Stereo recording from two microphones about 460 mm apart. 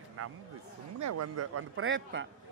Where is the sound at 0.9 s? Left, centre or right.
Right.